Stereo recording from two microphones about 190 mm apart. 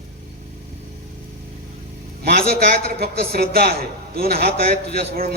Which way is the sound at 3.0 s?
55° right (ahead or behind).